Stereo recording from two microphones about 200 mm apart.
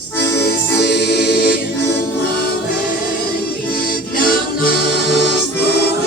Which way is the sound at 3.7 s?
45° left (ahead or behind).